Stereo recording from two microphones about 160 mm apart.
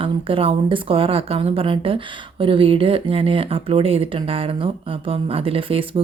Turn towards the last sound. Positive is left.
turn(degrees=-35)  # may be behind; listen again after turning